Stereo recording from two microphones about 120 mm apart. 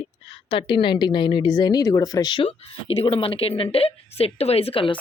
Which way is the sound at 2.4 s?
50° left (ahead or behind).